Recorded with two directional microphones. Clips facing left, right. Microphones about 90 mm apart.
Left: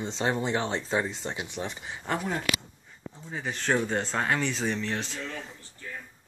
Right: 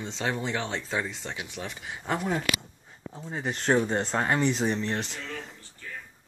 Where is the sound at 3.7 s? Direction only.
15° right (ahead or behind).